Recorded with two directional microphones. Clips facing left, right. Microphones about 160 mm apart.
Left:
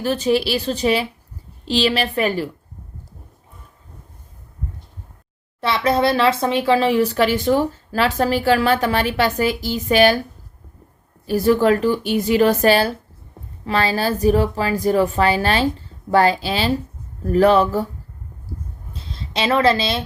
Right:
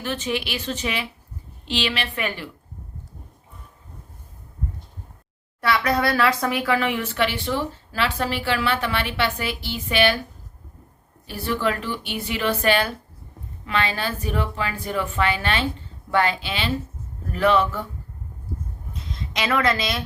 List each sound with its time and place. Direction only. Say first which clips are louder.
0.0 s speech: left 8 dB; 35° left (ahead or behind)
5.5 s speech: left 3 dB; 25° left (ahead or behind); by 10.2 s 40° left (ahead or behind)
11.3 s speech: left 10 dB; 40° left (ahead or behind)
18.9 s speech: left 4 dB; 30° left (ahead or behind)